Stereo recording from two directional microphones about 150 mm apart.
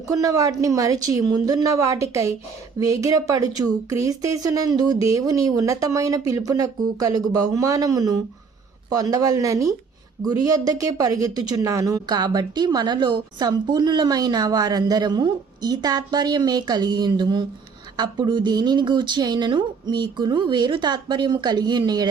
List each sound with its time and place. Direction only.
0.1 s speech: 25° right (ahead or behind)